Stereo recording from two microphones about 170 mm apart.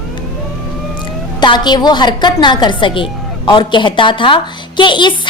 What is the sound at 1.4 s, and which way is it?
A woman's voice, 25° left (ahead or behind).